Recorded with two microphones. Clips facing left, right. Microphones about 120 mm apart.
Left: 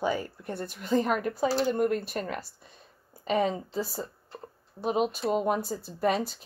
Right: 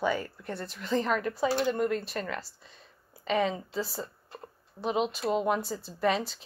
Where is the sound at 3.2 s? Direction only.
45° left (ahead or behind).